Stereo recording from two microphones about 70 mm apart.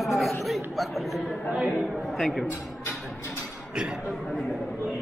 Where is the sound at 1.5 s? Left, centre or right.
Centre.